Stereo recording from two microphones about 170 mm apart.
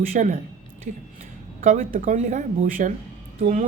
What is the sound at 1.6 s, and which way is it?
Speech, 45° right (ahead or behind).